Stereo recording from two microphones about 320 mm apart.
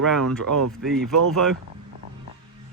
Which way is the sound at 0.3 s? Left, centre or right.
Right.